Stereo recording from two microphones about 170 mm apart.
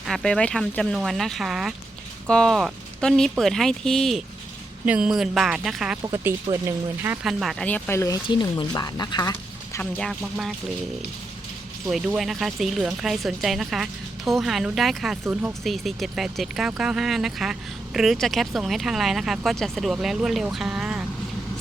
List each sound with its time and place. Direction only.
0.0 s speech: centre (ahead or behind)
6.0 s speech: 20° right (ahead or behind)
7.3 s speech: centre (ahead or behind); by 9.3 s 25° left (ahead or behind)
10.0 s speech: centre (ahead or behind)
11.9 s speech: centre (ahead or behind)
15.6 s speech: centre (ahead or behind)